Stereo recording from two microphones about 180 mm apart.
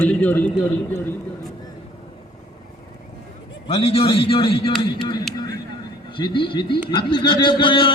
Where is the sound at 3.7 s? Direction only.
35° left (ahead or behind).